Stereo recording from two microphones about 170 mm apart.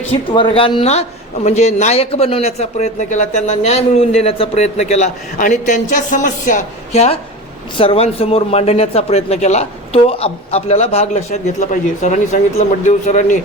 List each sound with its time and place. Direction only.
0.1 s a man's voice: 30° left (ahead or behind); by 13.4 s 45° left (ahead or behind)